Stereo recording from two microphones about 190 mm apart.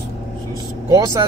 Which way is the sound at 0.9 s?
20° right (ahead or behind).